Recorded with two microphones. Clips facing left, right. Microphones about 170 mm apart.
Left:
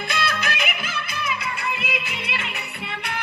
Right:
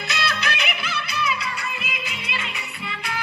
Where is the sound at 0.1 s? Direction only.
50° left (ahead or behind).